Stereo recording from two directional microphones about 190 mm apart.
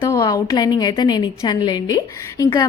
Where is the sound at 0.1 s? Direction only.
20° left (ahead or behind).